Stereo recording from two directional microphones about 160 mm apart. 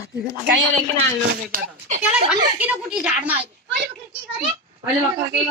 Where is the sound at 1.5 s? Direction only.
50° right (ahead or behind).